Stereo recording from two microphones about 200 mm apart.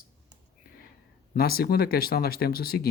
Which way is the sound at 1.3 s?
50° left (ahead or behind).